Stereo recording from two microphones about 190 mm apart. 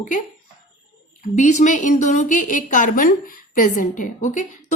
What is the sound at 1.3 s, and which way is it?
A woman's voice, 40° left (ahead or behind).